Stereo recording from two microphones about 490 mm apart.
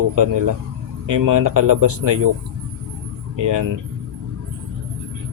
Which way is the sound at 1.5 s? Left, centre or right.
Right.